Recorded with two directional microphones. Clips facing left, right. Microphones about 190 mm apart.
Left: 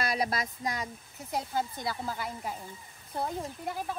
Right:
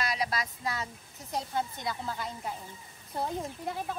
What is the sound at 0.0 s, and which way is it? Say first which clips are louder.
Speech: left 2 dB; 50° left (ahead or behind).